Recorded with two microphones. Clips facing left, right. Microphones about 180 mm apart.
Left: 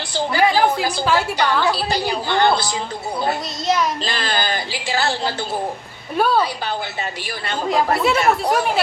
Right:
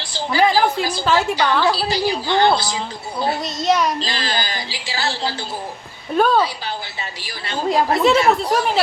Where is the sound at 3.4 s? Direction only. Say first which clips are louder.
Right 2 dB; centre (ahead or behind).